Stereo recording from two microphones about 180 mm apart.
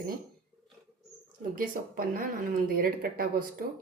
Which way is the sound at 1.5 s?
50° right (ahead or behind).